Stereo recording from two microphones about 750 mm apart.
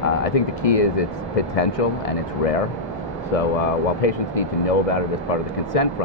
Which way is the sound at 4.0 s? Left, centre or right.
Left.